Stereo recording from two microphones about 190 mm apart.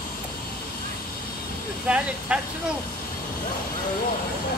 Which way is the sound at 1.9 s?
5° right (ahead or behind).